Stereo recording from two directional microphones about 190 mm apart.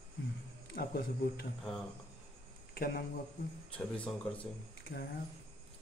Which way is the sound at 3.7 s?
5° left (ahead or behind).